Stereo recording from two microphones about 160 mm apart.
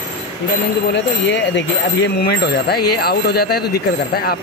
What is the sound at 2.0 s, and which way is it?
Speech, 90° left.